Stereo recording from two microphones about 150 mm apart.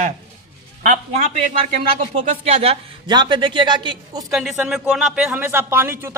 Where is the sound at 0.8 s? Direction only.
55° right (ahead or behind).